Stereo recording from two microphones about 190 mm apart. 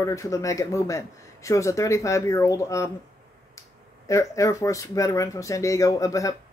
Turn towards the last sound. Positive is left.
turn(degrees=15)  # may be behind; listen again after turning